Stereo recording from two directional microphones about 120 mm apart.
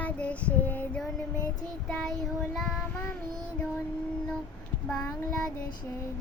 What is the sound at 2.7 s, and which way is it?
Child singing, 15° left (ahead or behind).